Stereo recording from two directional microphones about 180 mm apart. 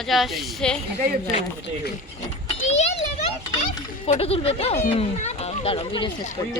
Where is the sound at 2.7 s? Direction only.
40° left (ahead or behind).